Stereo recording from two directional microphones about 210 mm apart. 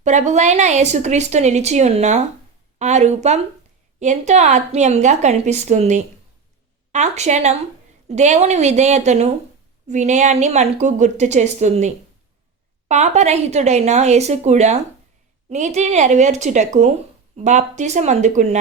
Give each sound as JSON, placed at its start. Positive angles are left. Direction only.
{"t": 0.0, "sound": "a woman's voice", "side_deg": -35}
{"t": 12.9, "sound": "a woman's voice", "side_deg": -30}